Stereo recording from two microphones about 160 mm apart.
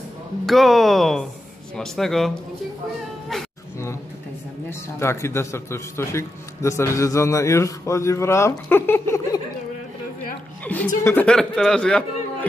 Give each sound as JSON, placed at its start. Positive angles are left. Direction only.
{"t": 0.5, "sound": "speech", "side_deg": 0}
{"t": 4.6, "sound": "a man's voice", "side_deg": 15}
{"t": 10.6, "sound": "chuckle", "side_deg": 10}
{"t": 11.1, "sound": "speech", "side_deg": 10}